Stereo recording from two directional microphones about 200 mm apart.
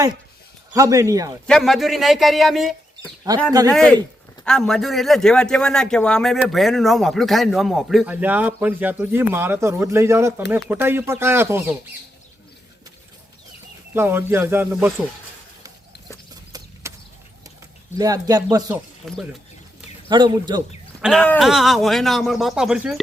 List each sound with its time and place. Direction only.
0.7 s a man's voice: 15° right (ahead or behind)
1.5 s a man's voice: centre (ahead or behind)
13.9 s a man's voice: 10° right (ahead or behind)
16.3 s horse: 20° right (ahead or behind)
17.9 s a man's voice: 15° right (ahead or behind)
19.0 s a man's voice: centre (ahead or behind)
20.1 s speech: 20° right (ahead or behind)
21.0 s a man's voice: centre (ahead or behind)